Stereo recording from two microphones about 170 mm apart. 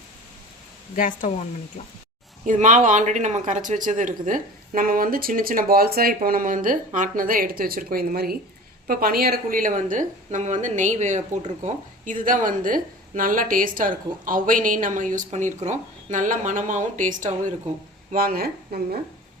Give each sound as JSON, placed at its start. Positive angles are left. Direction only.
{"t": 0.9, "sound": "speech", "side_deg": 50}
{"t": 2.4, "sound": "a woman's voice", "side_deg": -45}